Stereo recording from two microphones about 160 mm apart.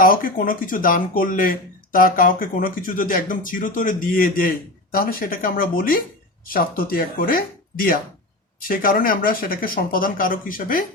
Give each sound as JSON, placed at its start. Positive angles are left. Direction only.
{"t": 0.0, "sound": "speech", "side_deg": 60}